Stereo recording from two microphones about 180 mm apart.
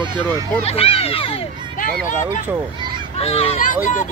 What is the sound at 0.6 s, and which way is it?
Speech, 35° left (ahead or behind).